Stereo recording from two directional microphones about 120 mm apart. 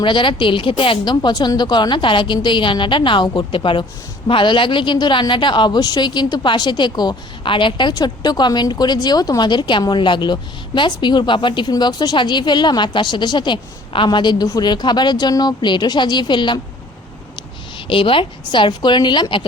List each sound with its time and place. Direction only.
0.0 s a woman's voice: 45° left (ahead or behind)
17.8 s a woman's voice: 45° left (ahead or behind)